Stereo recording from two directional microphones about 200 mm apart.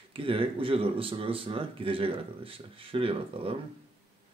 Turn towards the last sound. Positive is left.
turn(degrees=-25)  # may be behind; listen again after turning